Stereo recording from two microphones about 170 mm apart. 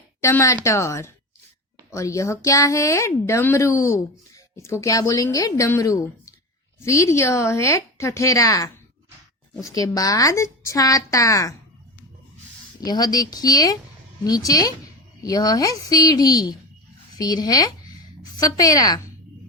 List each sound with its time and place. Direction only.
0.2 s a woman's voice: 15° left (ahead or behind)
12.8 s a woman's voice: 25° left (ahead or behind)